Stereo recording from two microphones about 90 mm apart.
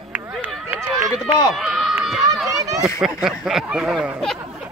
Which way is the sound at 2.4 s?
40° right (ahead or behind).